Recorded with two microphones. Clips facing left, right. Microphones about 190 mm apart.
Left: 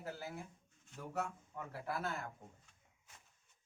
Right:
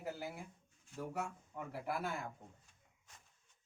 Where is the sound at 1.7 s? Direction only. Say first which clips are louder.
Right 1 dB; 15° right (ahead or behind).